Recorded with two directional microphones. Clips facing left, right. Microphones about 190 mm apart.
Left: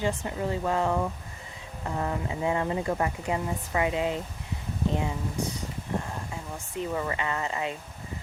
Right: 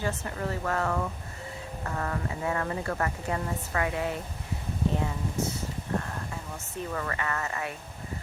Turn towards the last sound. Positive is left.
turn(degrees=20)  # may be behind; listen again after turning